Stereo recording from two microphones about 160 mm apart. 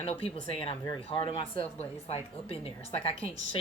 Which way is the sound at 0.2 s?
35° left (ahead or behind).